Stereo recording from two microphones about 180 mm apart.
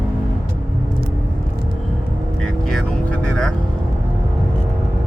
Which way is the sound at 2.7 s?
5° left (ahead or behind).